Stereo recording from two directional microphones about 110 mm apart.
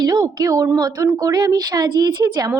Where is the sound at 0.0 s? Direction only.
40° right (ahead or behind).